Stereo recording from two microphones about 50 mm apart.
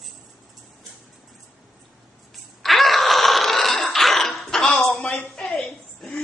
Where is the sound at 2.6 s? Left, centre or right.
Centre.